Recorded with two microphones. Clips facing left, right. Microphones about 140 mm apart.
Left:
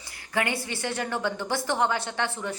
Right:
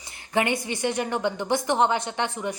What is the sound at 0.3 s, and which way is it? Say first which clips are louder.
A woman's voice: right 4 dB; 20° right (ahead or behind).